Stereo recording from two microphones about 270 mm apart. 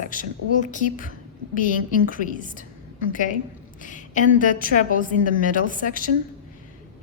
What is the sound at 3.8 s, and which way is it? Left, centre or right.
A woman's voice, left.